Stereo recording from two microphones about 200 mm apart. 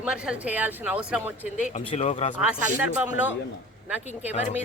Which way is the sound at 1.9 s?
35° left (ahead or behind).